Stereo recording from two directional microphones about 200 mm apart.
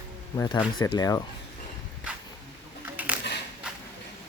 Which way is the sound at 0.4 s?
25° left (ahead or behind).